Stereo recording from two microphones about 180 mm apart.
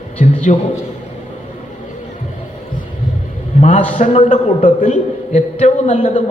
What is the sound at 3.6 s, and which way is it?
A man's voice, 45° left (ahead or behind).